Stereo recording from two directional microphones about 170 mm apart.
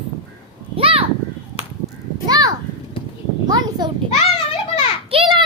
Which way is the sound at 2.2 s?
20° right (ahead or behind).